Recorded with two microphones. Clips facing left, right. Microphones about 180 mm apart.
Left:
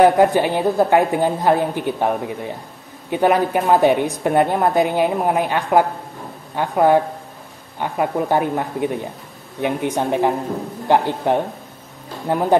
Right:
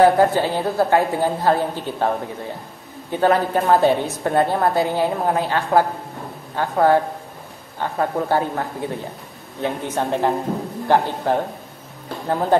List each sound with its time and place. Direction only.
0.0 s a woman's voice: 15° left (ahead or behind)